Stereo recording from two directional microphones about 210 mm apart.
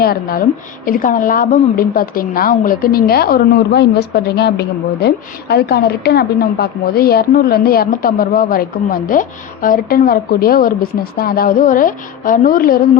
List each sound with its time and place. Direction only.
0.0 s a woman's voice: 45° left (ahead or behind)